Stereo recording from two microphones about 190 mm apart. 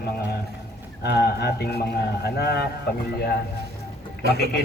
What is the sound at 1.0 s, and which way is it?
A man's voice, 60° left (ahead or behind).